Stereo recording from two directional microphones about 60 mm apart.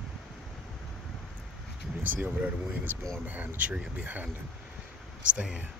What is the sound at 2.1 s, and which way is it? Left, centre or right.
Speech, right.